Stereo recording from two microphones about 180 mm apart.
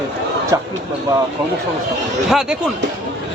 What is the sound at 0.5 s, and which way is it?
Speech, 20° right (ahead or behind).